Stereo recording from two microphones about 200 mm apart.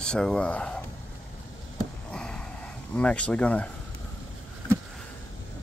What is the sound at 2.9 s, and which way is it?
Speech, 5° left (ahead or behind).